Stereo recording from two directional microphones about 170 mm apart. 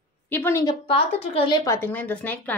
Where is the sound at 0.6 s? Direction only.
30° left (ahead or behind).